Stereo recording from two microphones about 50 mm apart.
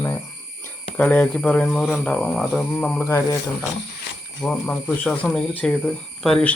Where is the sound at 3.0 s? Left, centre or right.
Left.